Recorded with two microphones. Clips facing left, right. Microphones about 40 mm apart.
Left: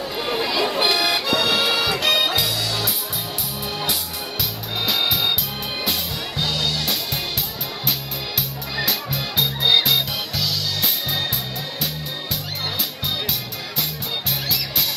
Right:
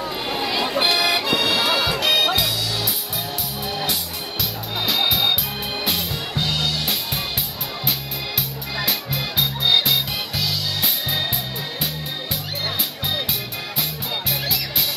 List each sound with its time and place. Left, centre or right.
0.2 s a sound: centre
0.5 s accordion: centre
1.5 s music: centre
4.4 s music: centre
6.3 s music: right
8.4 s music: centre